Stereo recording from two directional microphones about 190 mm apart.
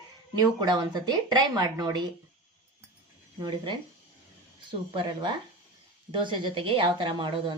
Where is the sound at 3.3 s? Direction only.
25° right (ahead or behind).